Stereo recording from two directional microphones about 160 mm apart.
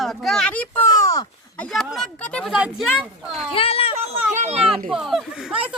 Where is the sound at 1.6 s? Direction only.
Centre (ahead or behind).